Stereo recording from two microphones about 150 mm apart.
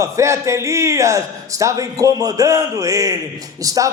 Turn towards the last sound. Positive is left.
turn(degrees=-25)  # may be behind; listen again after turning